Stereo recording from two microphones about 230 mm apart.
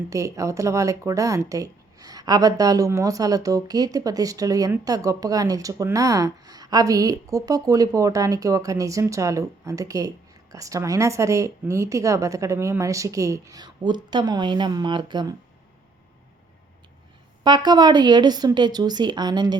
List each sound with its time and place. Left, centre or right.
0.1 s speech: centre
17.4 s speech: centre